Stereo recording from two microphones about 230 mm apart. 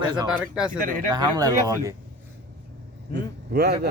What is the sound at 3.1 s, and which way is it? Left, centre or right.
Speech, right.